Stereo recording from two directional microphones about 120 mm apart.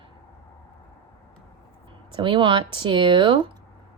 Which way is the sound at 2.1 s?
45° right (ahead or behind).